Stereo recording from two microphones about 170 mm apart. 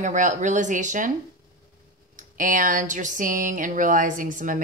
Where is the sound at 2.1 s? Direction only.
50° right (ahead or behind).